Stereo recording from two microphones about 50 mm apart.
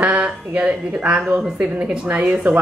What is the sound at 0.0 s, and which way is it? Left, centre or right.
Speech, right.